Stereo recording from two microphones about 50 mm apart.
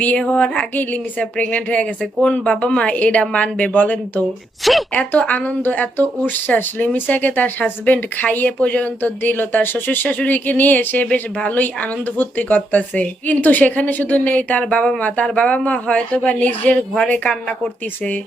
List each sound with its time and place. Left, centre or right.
0.0 s speech: left
4.6 s speech: centre
4.9 s speech: left
8.4 s speech: left
9.0 s speech: left